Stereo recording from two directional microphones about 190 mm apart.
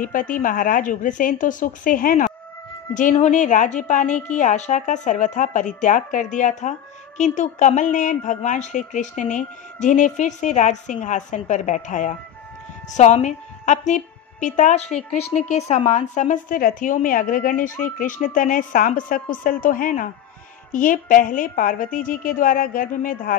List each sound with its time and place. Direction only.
0.0 s a woman's voice: 45° left (ahead or behind)